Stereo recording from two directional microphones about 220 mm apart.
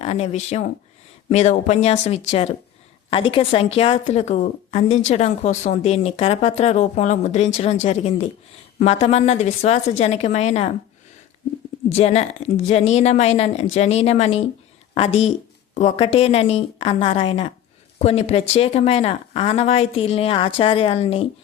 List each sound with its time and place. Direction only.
0.0 s a woman's voice: 30° left (ahead or behind)
11.9 s a woman's voice: 30° left (ahead or behind)